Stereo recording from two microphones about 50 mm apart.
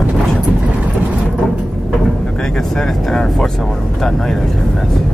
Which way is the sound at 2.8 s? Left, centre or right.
Centre.